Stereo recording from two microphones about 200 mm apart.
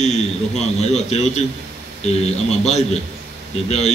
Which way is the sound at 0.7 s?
35° left (ahead or behind).